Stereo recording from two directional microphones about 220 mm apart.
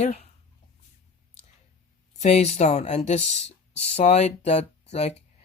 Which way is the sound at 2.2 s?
30° left (ahead or behind).